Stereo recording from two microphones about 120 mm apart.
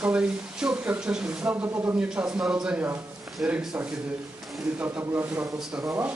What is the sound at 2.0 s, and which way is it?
A man's voice, 10° right (ahead or behind).